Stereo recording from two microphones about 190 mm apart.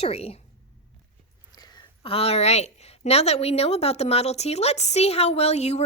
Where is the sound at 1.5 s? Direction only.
20° left (ahead or behind).